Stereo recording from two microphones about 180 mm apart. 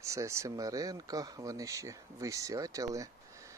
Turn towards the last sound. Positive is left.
turn(degrees=-15)  # may be behind; listen again after turning